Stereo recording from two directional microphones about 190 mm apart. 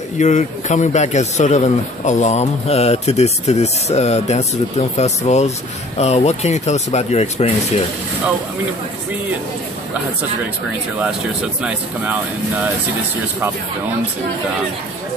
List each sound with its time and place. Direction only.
0.2 s a man's voice: 40° left (ahead or behind)
11.6 s speech: 10° right (ahead or behind)